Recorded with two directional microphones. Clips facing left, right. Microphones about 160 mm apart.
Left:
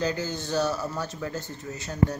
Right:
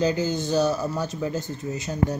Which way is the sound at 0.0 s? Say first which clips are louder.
Right 5 dB; 15° right (ahead or behind).